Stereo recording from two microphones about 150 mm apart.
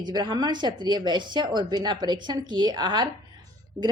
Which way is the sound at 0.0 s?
30° right (ahead or behind).